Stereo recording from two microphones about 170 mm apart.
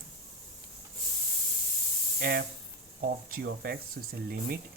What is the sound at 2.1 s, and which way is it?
Speech, 65° right (ahead or behind).